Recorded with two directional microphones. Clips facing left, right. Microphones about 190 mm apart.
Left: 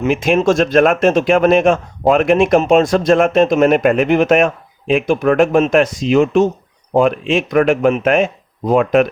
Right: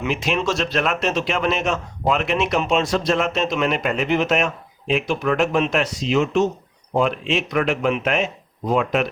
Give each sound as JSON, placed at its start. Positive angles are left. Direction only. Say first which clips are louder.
{"t": 0.0, "sound": "speech", "louder": "left 8 dB", "side_deg": 50}